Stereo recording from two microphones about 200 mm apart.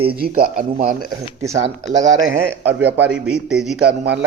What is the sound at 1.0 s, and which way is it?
Speech, 15° right (ahead or behind).